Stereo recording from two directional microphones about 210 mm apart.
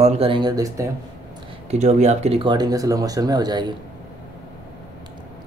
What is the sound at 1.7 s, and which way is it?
Speech, 35° right (ahead or behind).